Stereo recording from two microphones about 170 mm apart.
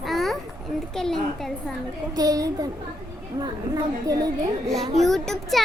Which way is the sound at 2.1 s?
20° right (ahead or behind).